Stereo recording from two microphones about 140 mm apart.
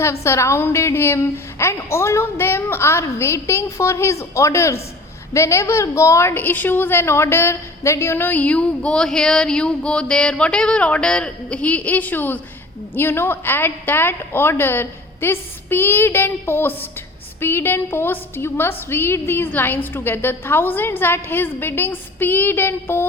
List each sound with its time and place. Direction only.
0.0 s a woman's voice: 20° left (ahead or behind)